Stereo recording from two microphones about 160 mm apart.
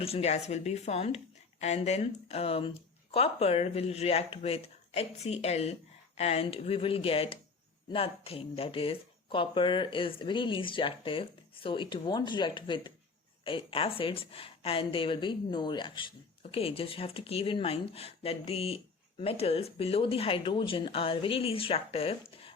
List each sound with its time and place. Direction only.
0.0 s speech: 40° left (ahead or behind)